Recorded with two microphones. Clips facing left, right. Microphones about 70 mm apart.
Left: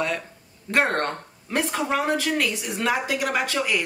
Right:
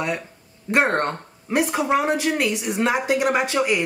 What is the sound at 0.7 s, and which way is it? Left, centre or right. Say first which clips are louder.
Speech: right 3 dB; right.